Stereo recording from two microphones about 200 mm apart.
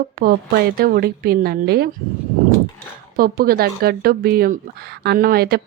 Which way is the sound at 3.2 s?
50° right (ahead or behind).